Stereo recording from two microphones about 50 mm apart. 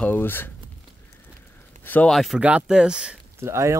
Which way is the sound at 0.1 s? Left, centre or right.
Left.